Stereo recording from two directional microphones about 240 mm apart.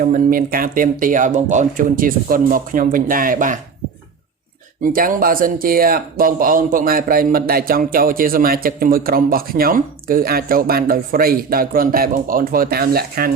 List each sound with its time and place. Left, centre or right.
0.0 s speech: right
4.8 s speech: right